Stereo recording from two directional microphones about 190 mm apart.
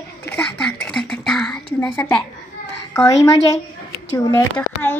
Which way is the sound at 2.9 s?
15° left (ahead or behind).